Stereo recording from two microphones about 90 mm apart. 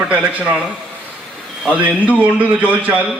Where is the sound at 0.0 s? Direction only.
15° right (ahead or behind).